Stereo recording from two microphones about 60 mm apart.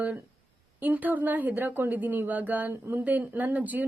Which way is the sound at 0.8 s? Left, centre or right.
Right.